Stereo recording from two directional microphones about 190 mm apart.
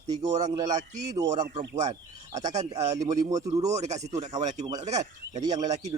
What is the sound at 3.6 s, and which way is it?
Speech, 35° right (ahead or behind).